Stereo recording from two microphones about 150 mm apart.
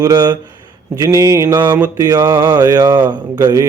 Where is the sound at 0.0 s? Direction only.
25° right (ahead or behind).